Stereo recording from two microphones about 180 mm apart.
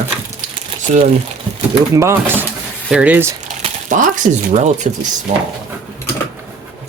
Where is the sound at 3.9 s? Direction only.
45° right (ahead or behind).